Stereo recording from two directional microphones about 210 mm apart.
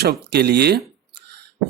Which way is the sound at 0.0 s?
50° right (ahead or behind).